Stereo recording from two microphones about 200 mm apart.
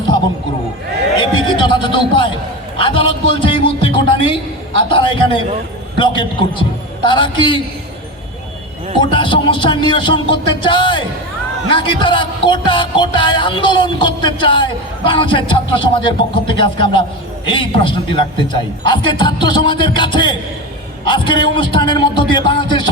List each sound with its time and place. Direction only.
1.2 s music: 25° left (ahead or behind)
9.0 s music: 25° left (ahead or behind)